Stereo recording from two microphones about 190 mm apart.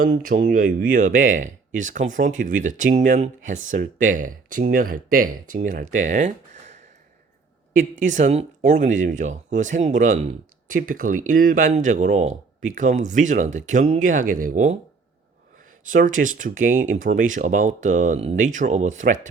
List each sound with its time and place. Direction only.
0.5 s speech: 45° right (ahead or behind)
15.9 s speech: 45° right (ahead or behind)